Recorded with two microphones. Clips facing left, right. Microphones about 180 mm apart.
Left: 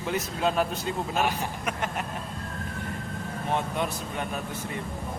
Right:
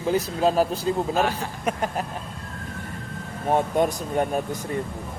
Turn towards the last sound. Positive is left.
turn(degrees=-45)  # may be behind; listen again after turning